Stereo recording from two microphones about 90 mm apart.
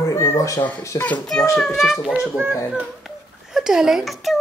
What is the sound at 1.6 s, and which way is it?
Speech, centre (ahead or behind).